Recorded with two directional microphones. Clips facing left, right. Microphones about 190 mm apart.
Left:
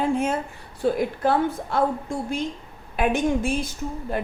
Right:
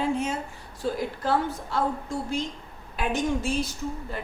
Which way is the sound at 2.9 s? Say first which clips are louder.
Left 5 dB; 55° left (ahead or behind).